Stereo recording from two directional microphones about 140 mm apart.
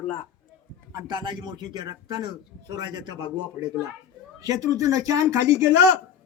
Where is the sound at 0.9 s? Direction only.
30° right (ahead or behind).